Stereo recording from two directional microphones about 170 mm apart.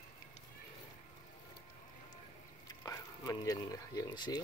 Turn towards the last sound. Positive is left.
turn(degrees=25)  # may be behind; listen again after turning